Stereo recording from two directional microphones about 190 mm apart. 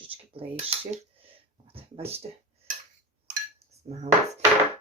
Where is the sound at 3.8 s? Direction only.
35° right (ahead or behind).